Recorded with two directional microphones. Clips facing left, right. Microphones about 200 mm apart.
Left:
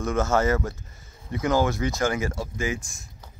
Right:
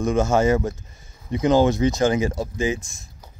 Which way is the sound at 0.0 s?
15° right (ahead or behind).